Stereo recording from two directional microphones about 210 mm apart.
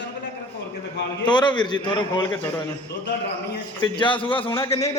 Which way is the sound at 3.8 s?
25° left (ahead or behind).